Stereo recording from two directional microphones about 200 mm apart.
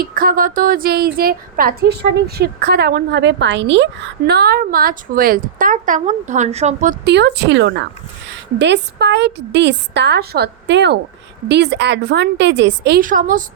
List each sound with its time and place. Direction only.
0.0 s a woman's voice: 45° right (ahead or behind)
7.0 s a woman's voice: 60° right (ahead or behind)
13.0 s a woman's voice: 40° right (ahead or behind)